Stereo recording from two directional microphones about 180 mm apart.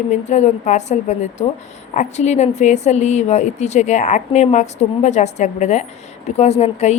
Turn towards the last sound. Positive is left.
turn(degrees=35)  # may be behind; listen again after turning